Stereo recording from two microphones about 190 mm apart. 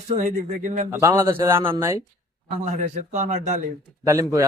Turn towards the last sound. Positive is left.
turn(degrees=-15)  # may be behind; listen again after turning